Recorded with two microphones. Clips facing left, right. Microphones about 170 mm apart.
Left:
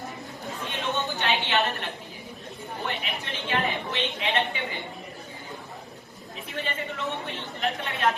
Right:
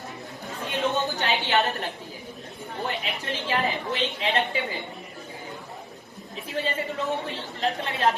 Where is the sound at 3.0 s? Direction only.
35° right (ahead or behind).